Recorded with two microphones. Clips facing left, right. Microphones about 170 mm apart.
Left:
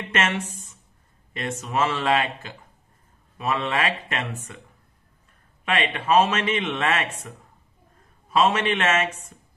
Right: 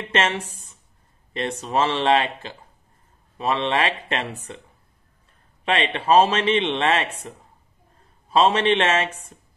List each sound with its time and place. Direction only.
0.1 s a woman's voice: 30° right (ahead or behind)
5.7 s a man's voice: 30° right (ahead or behind)
8.3 s a man's voice: 30° right (ahead or behind)